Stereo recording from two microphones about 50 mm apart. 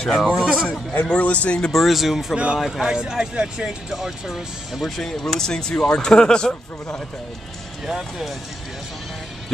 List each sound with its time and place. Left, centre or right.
0.0 s speech: centre
0.3 s speech: centre
0.7 s speech: left
1.7 s speech: centre
2.3 s speech: right
2.6 s speech: centre
4.9 s speech: centre
7.8 s speech: centre